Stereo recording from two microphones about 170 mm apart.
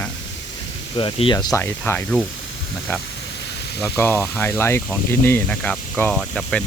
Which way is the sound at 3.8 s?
10° left (ahead or behind).